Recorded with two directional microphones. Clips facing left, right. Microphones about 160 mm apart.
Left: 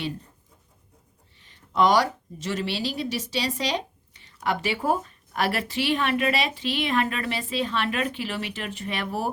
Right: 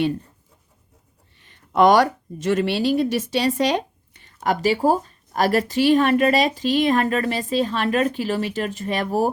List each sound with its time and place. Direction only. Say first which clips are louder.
1.4 s speech: right 5 dB; 55° right (ahead or behind)
4.4 s speech: right 6 dB; 35° right (ahead or behind)